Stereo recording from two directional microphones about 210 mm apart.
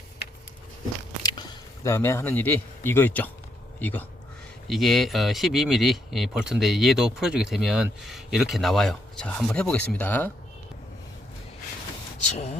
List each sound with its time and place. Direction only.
1.2 s a man's voice: 15° left (ahead or behind)
12.2 s speech: 35° left (ahead or behind)